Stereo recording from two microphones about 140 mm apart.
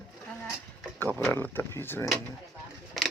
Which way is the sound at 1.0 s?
15° left (ahead or behind).